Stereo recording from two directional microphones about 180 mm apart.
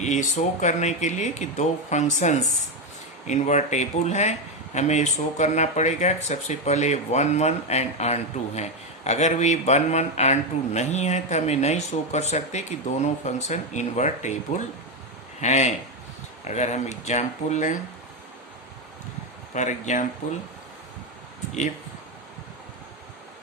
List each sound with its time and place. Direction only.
0.0 s a man's voice: 40° left (ahead or behind)
19.5 s speech: 40° left (ahead or behind)